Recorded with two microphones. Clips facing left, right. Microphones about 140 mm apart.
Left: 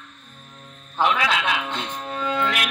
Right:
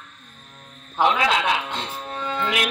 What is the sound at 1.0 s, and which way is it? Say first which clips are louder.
Speech: right 2 dB; 15° right (ahead or behind).